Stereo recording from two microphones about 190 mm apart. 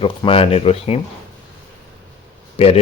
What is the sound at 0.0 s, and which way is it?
Speech, 30° left (ahead or behind).